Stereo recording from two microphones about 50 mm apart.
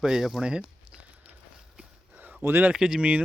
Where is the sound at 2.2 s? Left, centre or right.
Right.